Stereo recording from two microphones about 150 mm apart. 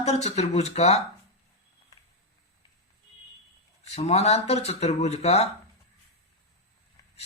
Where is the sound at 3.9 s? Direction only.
45° left (ahead or behind).